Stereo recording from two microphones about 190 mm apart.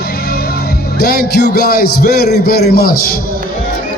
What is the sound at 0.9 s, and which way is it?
A man's voice, 55° left (ahead or behind).